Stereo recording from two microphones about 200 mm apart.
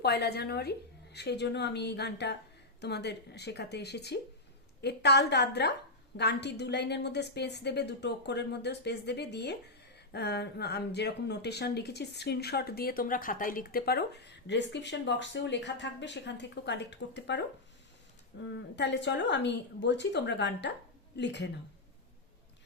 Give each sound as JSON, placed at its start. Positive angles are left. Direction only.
{"t": 0.0, "sound": "speech", "side_deg": 55}
{"t": 18.4, "sound": "speech", "side_deg": 60}